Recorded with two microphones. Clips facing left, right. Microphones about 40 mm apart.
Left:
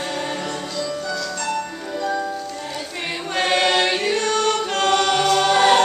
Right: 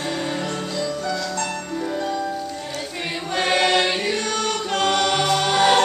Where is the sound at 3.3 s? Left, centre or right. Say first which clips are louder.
Left 1 dB; centre.